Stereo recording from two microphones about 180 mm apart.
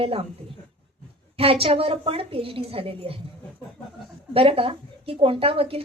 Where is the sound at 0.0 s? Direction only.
30° right (ahead or behind).